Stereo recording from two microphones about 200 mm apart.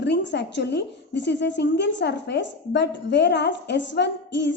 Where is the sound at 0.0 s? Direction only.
60° left (ahead or behind).